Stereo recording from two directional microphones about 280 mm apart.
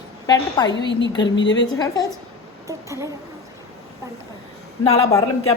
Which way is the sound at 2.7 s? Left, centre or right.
Centre.